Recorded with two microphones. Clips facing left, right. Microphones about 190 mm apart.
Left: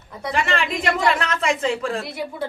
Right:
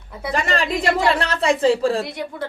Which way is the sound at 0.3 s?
40° right (ahead or behind).